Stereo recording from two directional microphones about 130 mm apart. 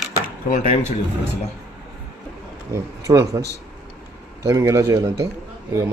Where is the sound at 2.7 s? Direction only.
20° right (ahead or behind).